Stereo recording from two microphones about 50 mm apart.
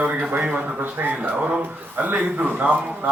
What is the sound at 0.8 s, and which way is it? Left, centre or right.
Speech, right.